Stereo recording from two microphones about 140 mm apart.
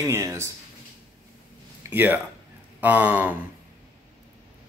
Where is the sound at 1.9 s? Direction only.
15° right (ahead or behind).